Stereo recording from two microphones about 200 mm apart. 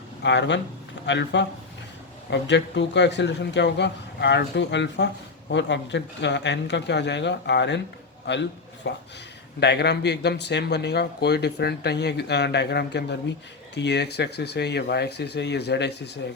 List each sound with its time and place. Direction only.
0.2 s a man's voice: 60° left (ahead or behind)